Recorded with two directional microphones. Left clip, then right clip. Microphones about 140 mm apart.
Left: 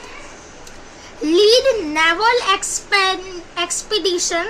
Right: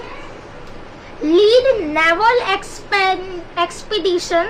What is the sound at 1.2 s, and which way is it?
A child's voice, 20° left (ahead or behind).